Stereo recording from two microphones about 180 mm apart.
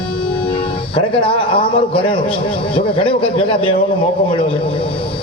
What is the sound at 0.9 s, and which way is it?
A man's voice, 30° left (ahead or behind).